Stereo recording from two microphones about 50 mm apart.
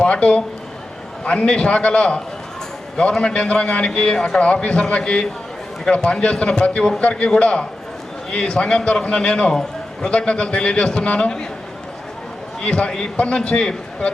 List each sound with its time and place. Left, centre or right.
0.0 s a man's voice: left
7.0 s a man's voice: left
12.6 s a man's voice: left